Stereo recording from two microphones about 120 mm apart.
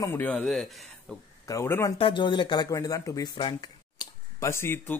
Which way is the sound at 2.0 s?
40° left (ahead or behind).